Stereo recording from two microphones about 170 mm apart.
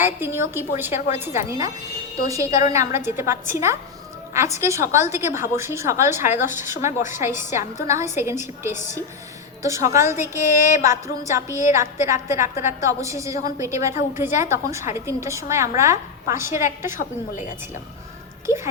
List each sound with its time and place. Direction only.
0.0 s a woman's voice: 15° right (ahead or behind)
18.4 s a woman's voice: 15° right (ahead or behind)